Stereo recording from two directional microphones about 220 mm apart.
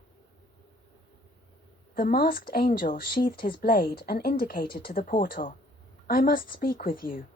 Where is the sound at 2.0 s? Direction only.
40° left (ahead or behind).